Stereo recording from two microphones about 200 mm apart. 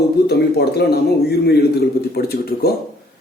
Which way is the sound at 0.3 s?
55° left (ahead or behind).